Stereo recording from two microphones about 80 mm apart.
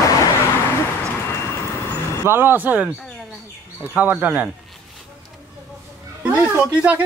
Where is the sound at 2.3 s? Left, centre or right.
Right.